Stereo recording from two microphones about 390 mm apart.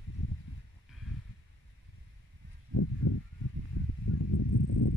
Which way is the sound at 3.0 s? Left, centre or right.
Left.